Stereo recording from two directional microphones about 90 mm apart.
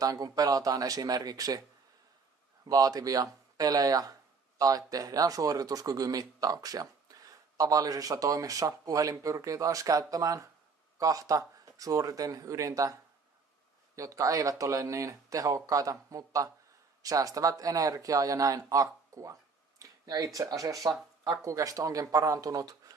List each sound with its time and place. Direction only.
0.0 s speech: 40° right (ahead or behind)
2.6 s speech: 40° right (ahead or behind)
13.9 s speech: 40° right (ahead or behind)
19.8 s a sound: 45° right (ahead or behind)
20.3 s speech: 40° right (ahead or behind)